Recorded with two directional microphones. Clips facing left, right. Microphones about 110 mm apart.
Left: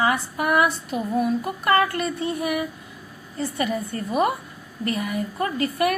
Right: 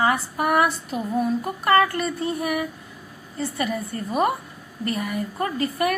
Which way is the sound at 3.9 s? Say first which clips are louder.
Right 1 dB; 40° right (ahead or behind).